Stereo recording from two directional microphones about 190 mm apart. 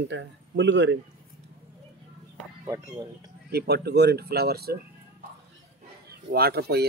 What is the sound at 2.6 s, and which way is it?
Speech, 20° right (ahead or behind).